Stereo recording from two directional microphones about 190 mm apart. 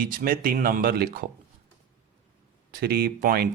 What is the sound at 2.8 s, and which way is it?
Speech, 55° right (ahead or behind).